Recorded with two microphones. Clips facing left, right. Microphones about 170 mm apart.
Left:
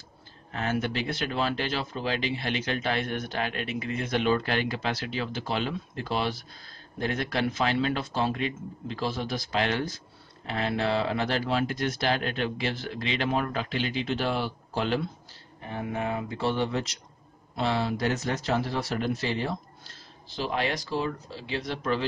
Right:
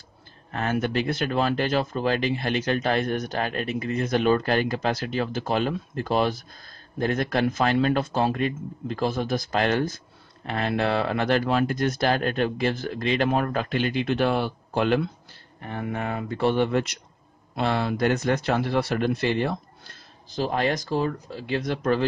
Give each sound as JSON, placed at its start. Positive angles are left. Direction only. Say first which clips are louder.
{"t": 0.5, "sound": "speech", "louder": "right 3 dB", "side_deg": -50}